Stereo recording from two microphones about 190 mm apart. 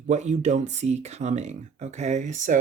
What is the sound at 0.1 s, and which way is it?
Speech, 35° right (ahead or behind).